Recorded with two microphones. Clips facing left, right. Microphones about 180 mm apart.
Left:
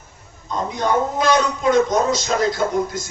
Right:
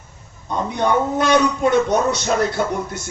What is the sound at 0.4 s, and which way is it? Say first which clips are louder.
A man's voice: right 2 dB; 60° right (ahead or behind).